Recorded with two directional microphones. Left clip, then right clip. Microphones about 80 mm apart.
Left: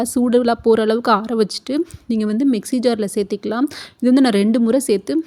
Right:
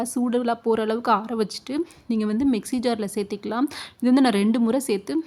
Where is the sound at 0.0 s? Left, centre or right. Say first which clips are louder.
Left 8 dB; left.